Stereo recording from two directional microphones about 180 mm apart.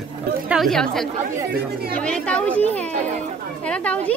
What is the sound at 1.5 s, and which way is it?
Speech, 60° right (ahead or behind).